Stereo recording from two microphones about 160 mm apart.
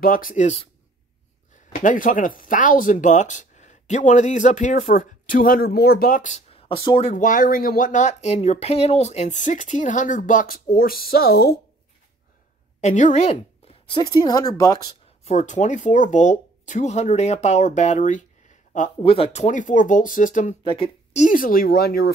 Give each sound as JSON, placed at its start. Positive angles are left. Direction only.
{"t": 0.0, "sound": "speech", "side_deg": 60}
{"t": 1.7, "sound": "speech", "side_deg": 55}
{"t": 6.5, "sound": "speech", "side_deg": 35}
{"t": 7.1, "sound": "speech", "side_deg": 55}
{"t": 12.8, "sound": "speech", "side_deg": 45}
{"t": 13.8, "sound": "speech", "side_deg": 30}
{"t": 15.2, "sound": "speech", "side_deg": 50}
{"t": 19.0, "sound": "speech", "side_deg": 40}
{"t": 20.6, "sound": "a woman's voice", "side_deg": 35}
{"t": 21.3, "sound": "speech", "side_deg": 60}